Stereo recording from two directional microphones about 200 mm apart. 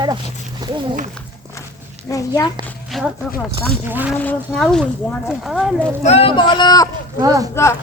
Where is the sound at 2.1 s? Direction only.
20° left (ahead or behind).